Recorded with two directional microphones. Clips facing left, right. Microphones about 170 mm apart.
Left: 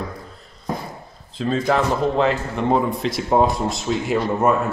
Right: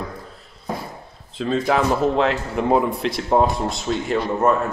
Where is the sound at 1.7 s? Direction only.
Centre (ahead or behind).